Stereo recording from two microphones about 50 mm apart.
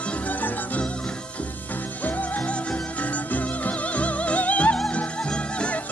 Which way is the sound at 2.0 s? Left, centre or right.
Left.